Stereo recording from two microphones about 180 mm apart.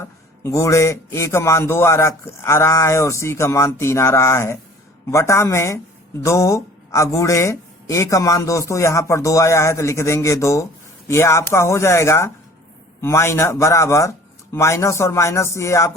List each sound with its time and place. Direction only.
0.0 s a man's voice: 15° left (ahead or behind)